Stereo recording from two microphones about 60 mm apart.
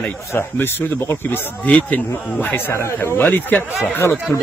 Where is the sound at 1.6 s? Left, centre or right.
Left.